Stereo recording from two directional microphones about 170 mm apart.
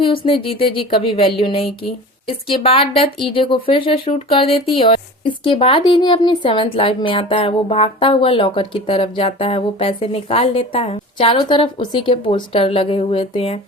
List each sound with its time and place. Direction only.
0.3 s speech: 30° left (ahead or behind)